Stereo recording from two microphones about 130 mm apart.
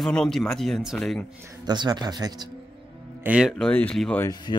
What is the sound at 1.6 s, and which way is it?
Speech, 35° right (ahead or behind).